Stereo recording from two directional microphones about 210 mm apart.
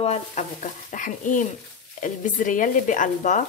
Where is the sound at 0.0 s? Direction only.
30° left (ahead or behind).